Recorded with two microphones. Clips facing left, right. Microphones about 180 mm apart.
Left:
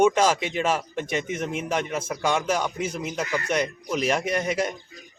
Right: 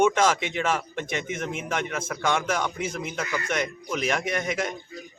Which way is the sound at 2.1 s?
10° left (ahead or behind).